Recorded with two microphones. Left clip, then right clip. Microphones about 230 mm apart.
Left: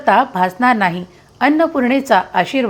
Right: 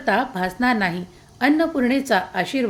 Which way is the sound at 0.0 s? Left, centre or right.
Centre.